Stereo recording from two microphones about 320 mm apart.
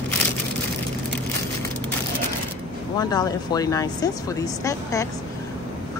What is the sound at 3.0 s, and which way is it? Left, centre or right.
Speech, centre.